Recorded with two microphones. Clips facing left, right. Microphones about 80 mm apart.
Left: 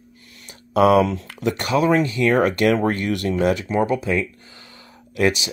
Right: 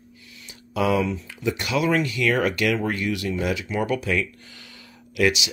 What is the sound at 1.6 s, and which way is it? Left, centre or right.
Speech, left.